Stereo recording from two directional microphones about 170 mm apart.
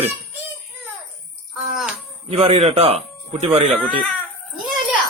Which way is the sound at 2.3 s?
35° right (ahead or behind).